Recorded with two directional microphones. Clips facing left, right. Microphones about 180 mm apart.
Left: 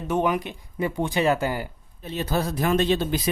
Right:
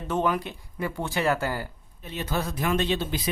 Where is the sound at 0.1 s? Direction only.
15° left (ahead or behind).